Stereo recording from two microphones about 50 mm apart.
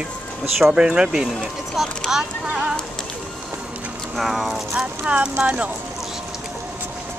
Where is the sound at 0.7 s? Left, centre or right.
Centre.